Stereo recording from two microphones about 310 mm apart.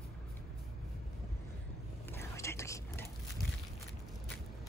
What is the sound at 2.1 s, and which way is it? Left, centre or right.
Whispering, centre.